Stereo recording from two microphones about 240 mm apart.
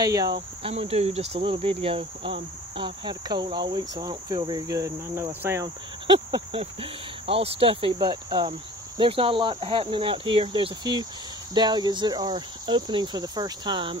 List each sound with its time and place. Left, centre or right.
0.0 s speech: centre
0.7 s cricket: right
11.5 s speech: centre